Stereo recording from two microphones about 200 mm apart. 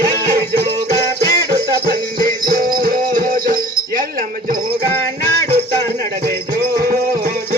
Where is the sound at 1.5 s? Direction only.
45° right (ahead or behind).